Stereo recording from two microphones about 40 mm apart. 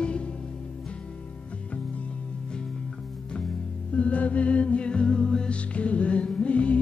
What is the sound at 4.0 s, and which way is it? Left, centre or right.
Music, left.